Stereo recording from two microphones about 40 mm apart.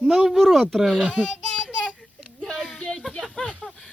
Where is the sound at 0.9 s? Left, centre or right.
Right.